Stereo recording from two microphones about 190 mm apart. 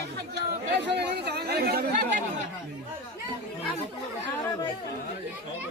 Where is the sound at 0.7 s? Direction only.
65° right (ahead or behind); by 2.2 s 45° right (ahead or behind).